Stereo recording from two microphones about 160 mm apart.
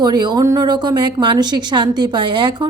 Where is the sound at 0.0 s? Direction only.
25° right (ahead or behind).